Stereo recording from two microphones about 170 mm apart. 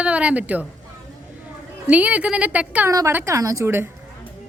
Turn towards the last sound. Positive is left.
turn(degrees=-15)  # may be behind; listen again after turning